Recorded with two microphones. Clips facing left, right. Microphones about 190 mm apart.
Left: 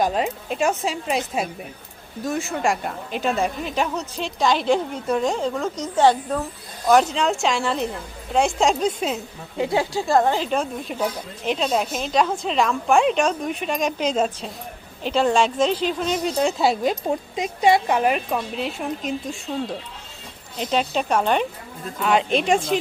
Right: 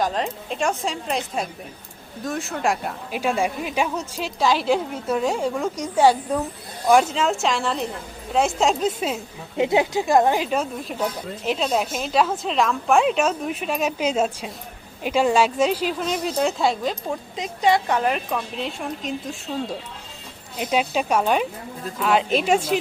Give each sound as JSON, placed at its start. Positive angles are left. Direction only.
{"t": 0.0, "sound": "a woman's voice", "side_deg": 10}
{"t": 9.6, "sound": "a woman's voice", "side_deg": -20}
{"t": 17.3, "sound": "a woman's voice", "side_deg": 10}